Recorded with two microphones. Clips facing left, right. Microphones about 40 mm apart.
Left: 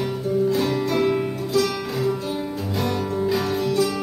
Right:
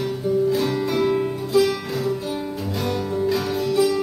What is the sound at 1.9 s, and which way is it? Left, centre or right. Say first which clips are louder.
Music: even; centre.